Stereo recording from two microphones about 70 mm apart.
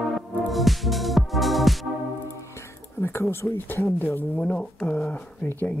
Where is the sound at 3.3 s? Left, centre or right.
Left.